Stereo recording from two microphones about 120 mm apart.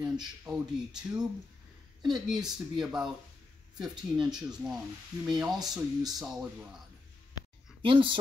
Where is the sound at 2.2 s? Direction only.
5° right (ahead or behind).